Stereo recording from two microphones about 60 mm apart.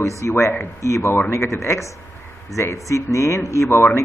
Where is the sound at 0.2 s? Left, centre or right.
Left.